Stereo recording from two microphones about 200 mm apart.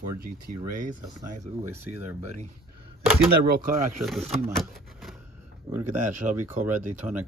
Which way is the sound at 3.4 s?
50° right (ahead or behind).